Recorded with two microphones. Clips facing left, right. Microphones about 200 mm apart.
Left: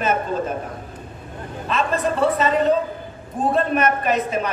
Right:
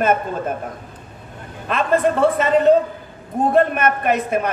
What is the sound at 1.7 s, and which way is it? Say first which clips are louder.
Speech: right 4 dB; 55° right (ahead or behind).